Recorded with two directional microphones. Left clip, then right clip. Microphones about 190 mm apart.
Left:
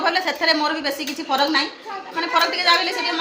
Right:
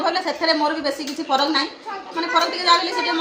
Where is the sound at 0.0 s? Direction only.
20° left (ahead or behind).